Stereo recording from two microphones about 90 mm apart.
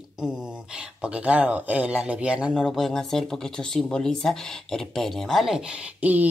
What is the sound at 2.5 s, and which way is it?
Speech, 5° left (ahead or behind).